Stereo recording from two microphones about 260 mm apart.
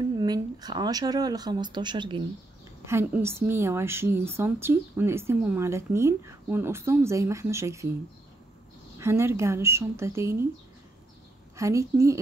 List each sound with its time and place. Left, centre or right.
0.2 s a woman's voice: centre
8.9 s a woman's voice: centre
11.5 s a woman's voice: centre